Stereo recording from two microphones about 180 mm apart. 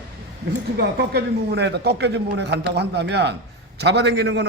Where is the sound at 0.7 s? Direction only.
60° right (ahead or behind).